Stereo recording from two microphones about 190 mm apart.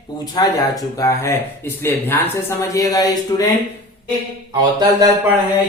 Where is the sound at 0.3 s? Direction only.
20° left (ahead or behind).